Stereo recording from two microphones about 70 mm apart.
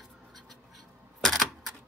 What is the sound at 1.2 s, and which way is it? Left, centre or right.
Typewriter, centre.